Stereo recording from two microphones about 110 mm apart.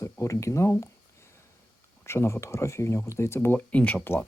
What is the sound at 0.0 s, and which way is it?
Speech, 25° left (ahead or behind).